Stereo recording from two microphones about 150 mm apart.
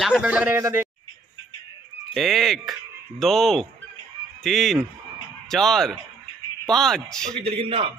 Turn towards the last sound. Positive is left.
turn(degrees=-35)  # may be behind; listen again after turning